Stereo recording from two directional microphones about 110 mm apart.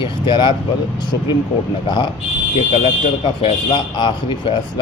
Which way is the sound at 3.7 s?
45° left (ahead or behind).